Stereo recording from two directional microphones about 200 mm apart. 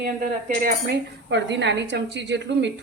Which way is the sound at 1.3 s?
60° right (ahead or behind).